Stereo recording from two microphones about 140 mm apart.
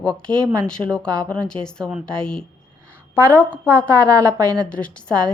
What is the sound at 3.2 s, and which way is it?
Speech, 15° left (ahead or behind).